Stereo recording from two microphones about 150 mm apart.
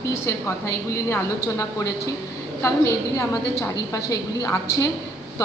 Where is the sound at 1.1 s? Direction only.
20° left (ahead or behind).